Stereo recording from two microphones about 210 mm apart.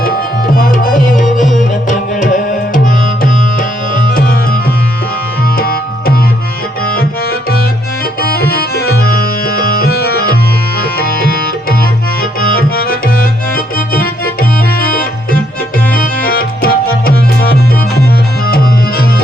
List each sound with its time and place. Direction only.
0.5 s tabla: 40° left (ahead or behind)
1.5 s music: 35° left (ahead or behind)
3.9 s tabla: 40° left (ahead or behind)
5.5 s tabla: 45° left (ahead or behind)
6.8 s music: 45° left (ahead or behind)
8.2 s tabla: 45° left (ahead or behind)
10.9 s music: 45° left (ahead or behind)
12.4 s tabla: 45° left (ahead or behind)
15.9 s music: 45° left (ahead or behind)
18.4 s music: 45° left (ahead or behind)